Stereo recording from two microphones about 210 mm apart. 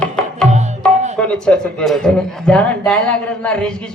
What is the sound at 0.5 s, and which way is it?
Tabla, 35° right (ahead or behind).